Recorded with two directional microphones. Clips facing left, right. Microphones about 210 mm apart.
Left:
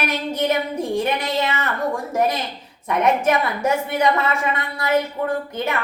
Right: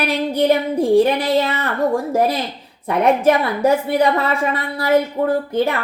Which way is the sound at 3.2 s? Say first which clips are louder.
Right 5 dB; 35° right (ahead or behind).